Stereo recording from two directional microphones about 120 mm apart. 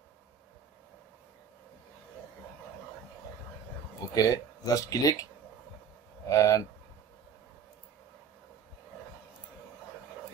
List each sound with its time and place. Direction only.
4.1 s speech: 30° left (ahead or behind)
6.2 s speech: 25° left (ahead or behind)